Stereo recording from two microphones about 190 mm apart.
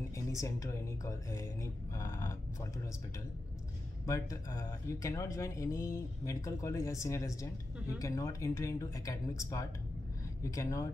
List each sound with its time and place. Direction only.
0.3 s speech: 15° left (ahead or behind)
4.0 s speech: 15° left (ahead or behind)